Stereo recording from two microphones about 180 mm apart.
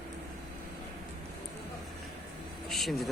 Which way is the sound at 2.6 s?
Centre (ahead or behind).